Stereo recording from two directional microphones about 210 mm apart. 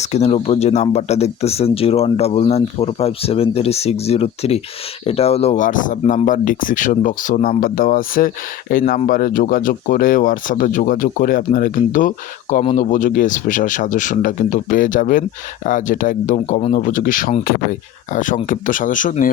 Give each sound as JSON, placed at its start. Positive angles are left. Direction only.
{"t": 0.0, "sound": "speech", "side_deg": 30}